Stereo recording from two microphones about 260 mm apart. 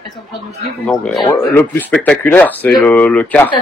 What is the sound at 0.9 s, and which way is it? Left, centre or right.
Speech, centre.